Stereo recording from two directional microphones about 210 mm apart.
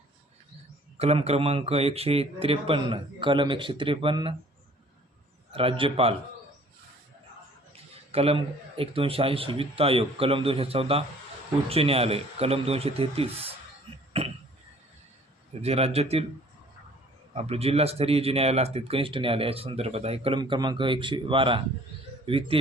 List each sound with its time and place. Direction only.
0.9 s speech: 30° right (ahead or behind)
5.5 s speech: 25° right (ahead or behind)
8.1 s speech: 30° right (ahead or behind)
15.6 s speech: 30° right (ahead or behind)
17.3 s speech: 30° right (ahead or behind)